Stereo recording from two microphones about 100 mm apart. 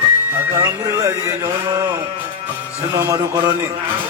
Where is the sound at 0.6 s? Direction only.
35° right (ahead or behind).